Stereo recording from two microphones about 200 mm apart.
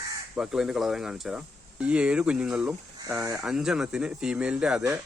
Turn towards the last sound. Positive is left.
turn(degrees=-5)  # may be behind; listen again after turning